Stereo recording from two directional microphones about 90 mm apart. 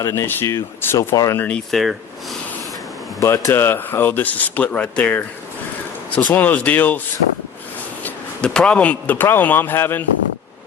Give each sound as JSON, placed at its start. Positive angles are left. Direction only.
{"t": 0.0, "sound": "speech", "side_deg": 30}
{"t": 0.9, "sound": "speech", "side_deg": 40}
{"t": 1.4, "sound": "speech", "side_deg": 15}
{"t": 1.7, "sound": "speech", "side_deg": 0}
{"t": 3.2, "sound": "speech", "side_deg": 35}
{"t": 6.3, "sound": "speech", "side_deg": 20}
{"t": 8.0, "sound": "speech", "side_deg": 10}